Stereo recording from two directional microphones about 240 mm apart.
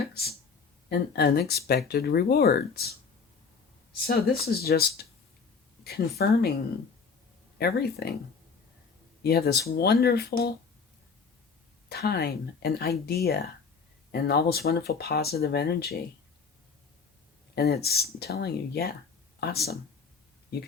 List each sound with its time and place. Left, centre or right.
0.9 s speech: left
4.0 s speech: left
7.6 s speech: left
9.2 s speech: left
11.9 s speech: left
17.5 s speech: left